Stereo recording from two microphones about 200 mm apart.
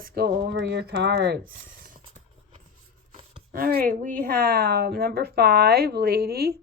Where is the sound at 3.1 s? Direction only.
30° right (ahead or behind).